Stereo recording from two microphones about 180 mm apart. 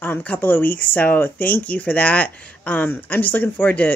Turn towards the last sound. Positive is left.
turn(degrees=10)  # may be behind; listen again after turning